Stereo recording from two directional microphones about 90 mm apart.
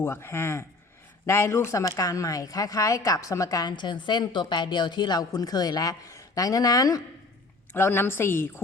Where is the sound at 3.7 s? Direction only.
60° left (ahead or behind); by 7.0 s 40° left (ahead or behind).